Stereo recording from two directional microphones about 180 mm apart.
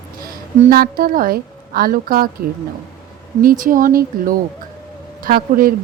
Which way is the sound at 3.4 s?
50° right (ahead or behind).